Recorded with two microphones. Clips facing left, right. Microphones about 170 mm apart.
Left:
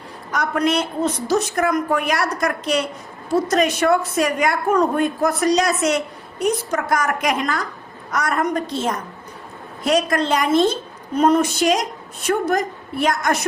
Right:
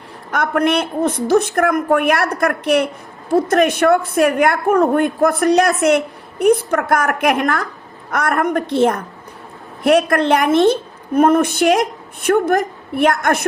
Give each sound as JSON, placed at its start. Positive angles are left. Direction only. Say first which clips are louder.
{"t": 0.3, "sound": "a woman's voice", "louder": "right 3 dB", "side_deg": -55}